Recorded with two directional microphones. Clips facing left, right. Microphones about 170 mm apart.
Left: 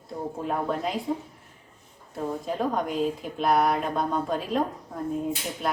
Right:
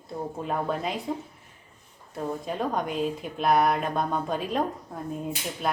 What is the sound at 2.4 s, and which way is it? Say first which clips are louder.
A woman's voice: left 2 dB; centre (ahead or behind).